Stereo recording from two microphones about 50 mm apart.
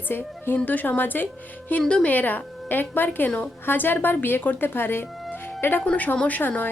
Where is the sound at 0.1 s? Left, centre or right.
Left.